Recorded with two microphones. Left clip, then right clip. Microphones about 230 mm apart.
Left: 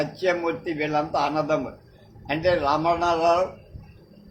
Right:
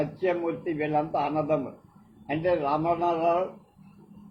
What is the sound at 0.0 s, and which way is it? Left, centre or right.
Speech, left.